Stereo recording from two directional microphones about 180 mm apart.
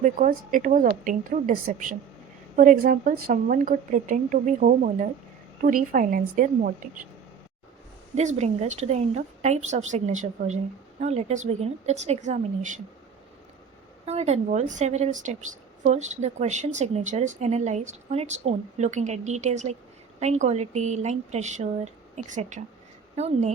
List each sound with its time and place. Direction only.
0.0 s a woman's voice: 50° right (ahead or behind)
8.1 s speech: 40° right (ahead or behind)
14.0 s a woman's voice: 35° right (ahead or behind)